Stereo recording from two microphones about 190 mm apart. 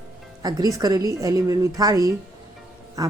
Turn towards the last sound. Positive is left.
turn(degrees=-20)  # may be behind; listen again after turning